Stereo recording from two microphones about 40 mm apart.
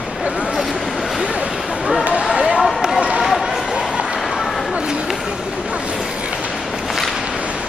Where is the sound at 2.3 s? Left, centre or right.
Right.